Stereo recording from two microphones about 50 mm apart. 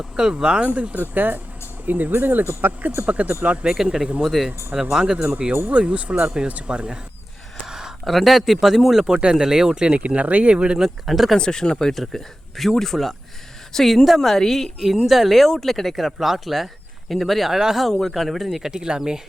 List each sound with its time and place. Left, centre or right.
0.0 s speech: centre
0.6 s speech: right
3.1 s speech: right
7.7 s a sound: centre
8.0 s speech: centre
10.8 s speech: centre
11.3 s speech: centre
11.9 s speech: centre
14.8 s speech: centre
18.0 s speech: centre
18.7 s speech: centre